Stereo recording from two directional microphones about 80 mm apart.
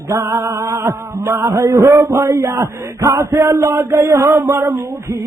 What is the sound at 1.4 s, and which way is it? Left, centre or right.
A man's voice, right.